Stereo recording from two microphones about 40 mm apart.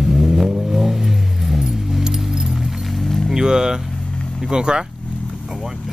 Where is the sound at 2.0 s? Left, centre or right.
Centre.